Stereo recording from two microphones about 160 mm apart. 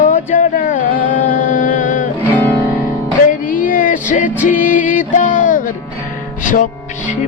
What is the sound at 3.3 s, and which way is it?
Music, 60° left (ahead or behind).